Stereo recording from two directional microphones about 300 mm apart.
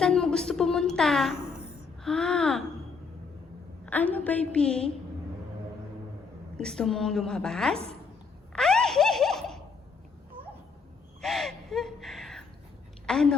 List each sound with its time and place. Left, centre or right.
0.0 s a woman's voice: centre
3.8 s a woman's voice: centre
6.6 s a woman's voice: centre
8.5 s a sound: centre
10.4 s dog: centre
11.2 s gasp: centre
13.1 s speech: centre